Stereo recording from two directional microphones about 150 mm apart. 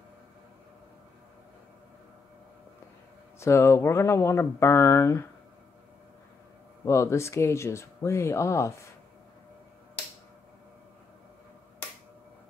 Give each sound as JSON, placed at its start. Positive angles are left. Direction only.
{"t": 3.3, "sound": "speech", "side_deg": 20}
{"t": 6.8, "sound": "speech", "side_deg": 20}